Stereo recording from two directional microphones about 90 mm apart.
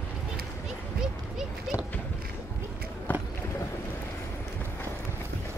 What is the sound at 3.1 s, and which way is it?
Run, 20° left (ahead or behind).